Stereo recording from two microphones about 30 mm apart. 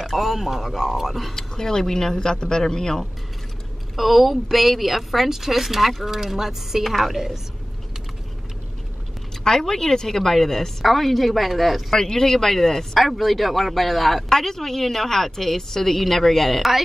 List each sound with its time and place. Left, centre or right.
0.0 s speech: centre
1.3 s speech: centre
3.9 s a woman's voice: centre
9.4 s a woman's voice: centre
10.8 s a woman's voice: centre
11.9 s a woman's voice: centre
13.0 s a woman's voice: centre
14.3 s a woman's voice: centre